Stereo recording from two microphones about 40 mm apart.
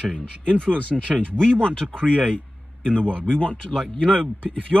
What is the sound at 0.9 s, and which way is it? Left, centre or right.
Speech, centre.